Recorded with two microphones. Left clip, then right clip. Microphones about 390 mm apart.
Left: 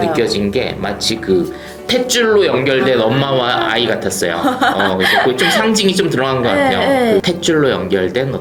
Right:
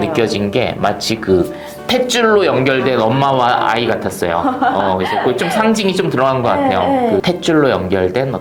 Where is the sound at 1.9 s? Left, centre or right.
Right.